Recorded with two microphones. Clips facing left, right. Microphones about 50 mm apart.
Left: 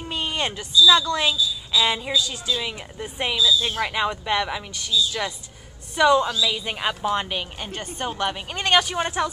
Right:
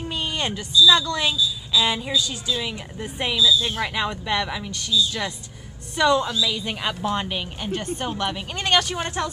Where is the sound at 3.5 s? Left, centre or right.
Left.